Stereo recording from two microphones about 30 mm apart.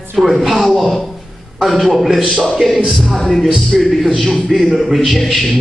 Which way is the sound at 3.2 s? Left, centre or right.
Centre.